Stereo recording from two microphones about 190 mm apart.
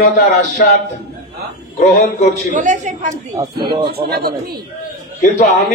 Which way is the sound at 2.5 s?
40° right (ahead or behind).